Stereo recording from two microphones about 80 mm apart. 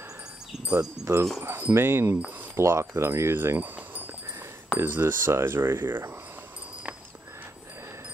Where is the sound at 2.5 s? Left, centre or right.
Right.